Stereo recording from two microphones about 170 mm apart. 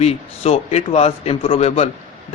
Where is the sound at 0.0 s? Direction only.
40° left (ahead or behind).